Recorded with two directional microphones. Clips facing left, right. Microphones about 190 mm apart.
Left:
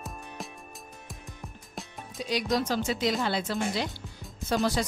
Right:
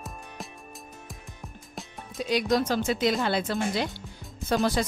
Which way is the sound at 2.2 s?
55° right (ahead or behind).